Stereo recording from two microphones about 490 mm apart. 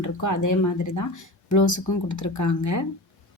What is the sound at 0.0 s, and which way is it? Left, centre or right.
A woman's voice, left.